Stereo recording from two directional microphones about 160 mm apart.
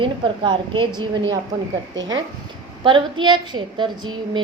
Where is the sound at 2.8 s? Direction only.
30° right (ahead or behind).